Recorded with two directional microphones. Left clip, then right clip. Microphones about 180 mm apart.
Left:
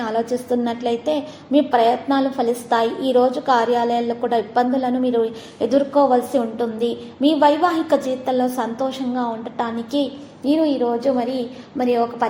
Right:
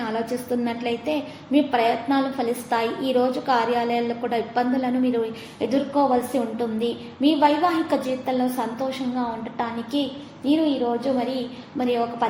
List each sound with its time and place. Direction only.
0.6 s a woman's voice: 20° left (ahead or behind)